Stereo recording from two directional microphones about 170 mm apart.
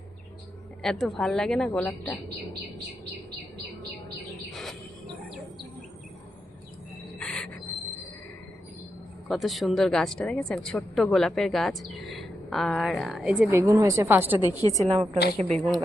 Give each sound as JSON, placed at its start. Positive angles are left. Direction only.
{"t": 0.8, "sound": "a woman's voice", "side_deg": 0}
{"t": 4.5, "sound": "bird", "side_deg": 0}
{"t": 7.2, "sound": "a sound", "side_deg": 5}
{"t": 9.3, "sound": "a woman's voice", "side_deg": 0}
{"t": 13.5, "sound": "a woman's voice", "side_deg": -15}
{"t": 14.8, "sound": "a woman's voice", "side_deg": -25}
{"t": 15.4, "sound": "a woman's voice", "side_deg": 5}